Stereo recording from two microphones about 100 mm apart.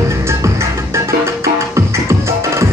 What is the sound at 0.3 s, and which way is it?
Music, 30° right (ahead or behind).